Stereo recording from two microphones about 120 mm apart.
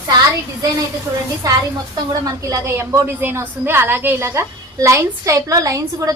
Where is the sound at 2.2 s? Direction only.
30° right (ahead or behind).